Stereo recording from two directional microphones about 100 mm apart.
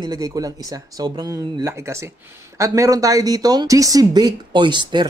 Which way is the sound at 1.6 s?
30° right (ahead or behind).